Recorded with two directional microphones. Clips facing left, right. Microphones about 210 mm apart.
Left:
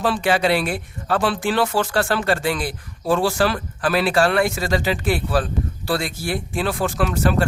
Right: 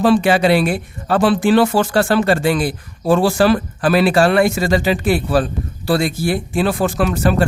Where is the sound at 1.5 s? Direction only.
35° right (ahead or behind).